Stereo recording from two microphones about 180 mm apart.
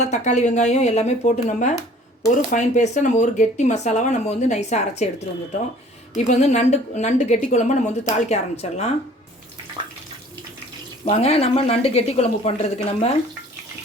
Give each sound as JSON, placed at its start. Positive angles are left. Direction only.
{"t": 0.0, "sound": "speech", "side_deg": 40}
{"t": 11.0, "sound": "speech", "side_deg": 35}